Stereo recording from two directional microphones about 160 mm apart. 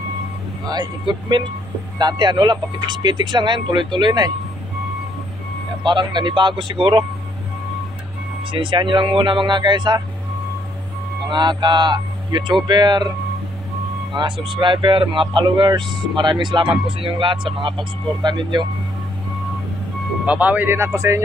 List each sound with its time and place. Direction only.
0.7 s speech: 25° right (ahead or behind)
5.9 s speech: 30° right (ahead or behind)
8.5 s speech: 30° right (ahead or behind)
11.2 s speech: 30° right (ahead or behind)
14.1 s speech: 30° right (ahead or behind)
20.2 s speech: 10° right (ahead or behind)